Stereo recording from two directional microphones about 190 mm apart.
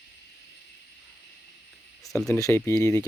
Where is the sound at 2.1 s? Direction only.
5° left (ahead or behind).